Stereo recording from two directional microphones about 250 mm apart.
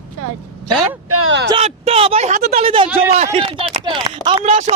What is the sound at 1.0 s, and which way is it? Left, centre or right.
Speech, right.